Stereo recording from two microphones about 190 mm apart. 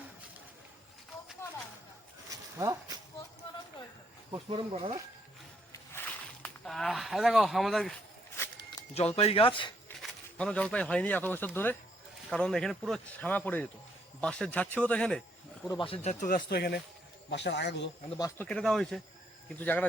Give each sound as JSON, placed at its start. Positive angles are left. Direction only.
{"t": 2.6, "sound": "speech", "side_deg": -20}
{"t": 4.3, "sound": "speech", "side_deg": -30}
{"t": 6.4, "sound": "speech", "side_deg": 0}
{"t": 9.0, "sound": "speech", "side_deg": 30}
{"t": 10.0, "sound": "speech", "side_deg": 5}
{"t": 15.6, "sound": "speech", "side_deg": 25}
{"t": 18.2, "sound": "speech", "side_deg": 10}